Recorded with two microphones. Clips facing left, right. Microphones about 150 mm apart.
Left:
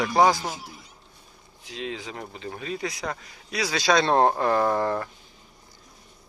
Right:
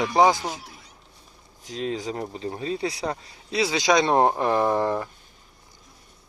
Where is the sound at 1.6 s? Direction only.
40° right (ahead or behind); by 5.1 s 15° right (ahead or behind).